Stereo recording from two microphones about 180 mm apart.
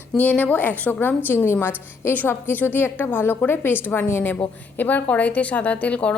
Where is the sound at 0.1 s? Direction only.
10° left (ahead or behind).